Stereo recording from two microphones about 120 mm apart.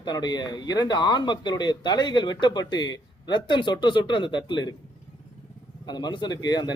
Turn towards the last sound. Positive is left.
turn(degrees=35)  # may be behind; listen again after turning